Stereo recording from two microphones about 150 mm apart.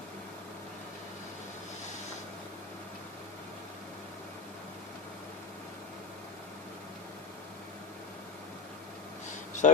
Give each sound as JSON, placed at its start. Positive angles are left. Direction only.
{"t": 9.6, "sound": "speech", "side_deg": 55}